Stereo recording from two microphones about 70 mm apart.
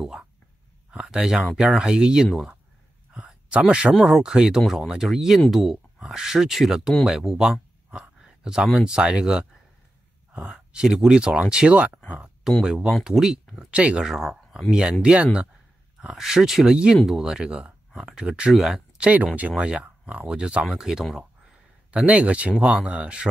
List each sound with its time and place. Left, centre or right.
0.0 s speech: centre
3.1 s a sound: centre
3.9 s speech: centre
7.9 s a sound: centre
8.7 s speech: centre
19.0 s speech: right; by 21.2 s centre
21.9 s speech: centre